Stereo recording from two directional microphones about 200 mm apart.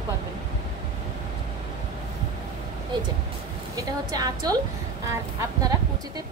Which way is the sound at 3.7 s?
20° right (ahead or behind).